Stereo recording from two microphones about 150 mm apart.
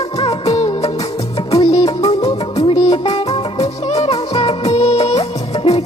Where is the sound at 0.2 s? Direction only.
40° left (ahead or behind).